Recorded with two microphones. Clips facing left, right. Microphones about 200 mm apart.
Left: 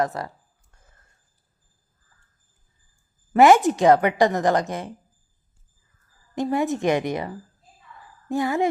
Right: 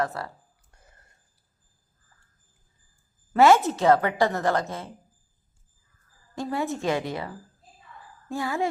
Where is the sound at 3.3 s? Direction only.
15° left (ahead or behind).